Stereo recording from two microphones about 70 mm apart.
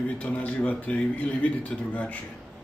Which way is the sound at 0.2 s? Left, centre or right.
Centre.